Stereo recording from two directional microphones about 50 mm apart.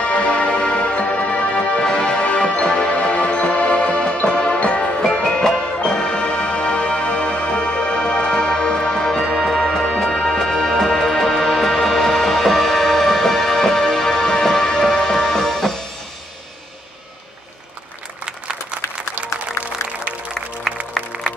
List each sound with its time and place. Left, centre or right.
0.0 s music: left; by 15.7 s centre
18.2 s a sound: centre
21.0 s music: centre